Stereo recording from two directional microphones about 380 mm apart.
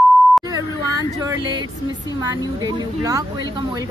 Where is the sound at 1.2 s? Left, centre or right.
Centre.